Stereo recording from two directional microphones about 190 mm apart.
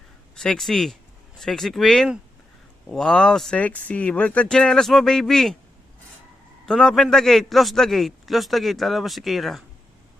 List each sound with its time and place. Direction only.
0.3 s a man's voice: 5° left (ahead or behind)
6.7 s a man's voice: centre (ahead or behind)